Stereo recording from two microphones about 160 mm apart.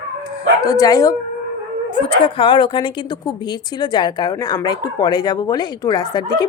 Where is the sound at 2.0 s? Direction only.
30° left (ahead or behind).